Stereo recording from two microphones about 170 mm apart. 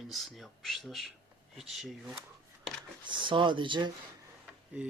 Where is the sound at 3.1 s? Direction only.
30° right (ahead or behind).